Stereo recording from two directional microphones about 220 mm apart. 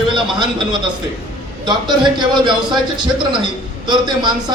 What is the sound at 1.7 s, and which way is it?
A man's voice, 20° right (ahead or behind).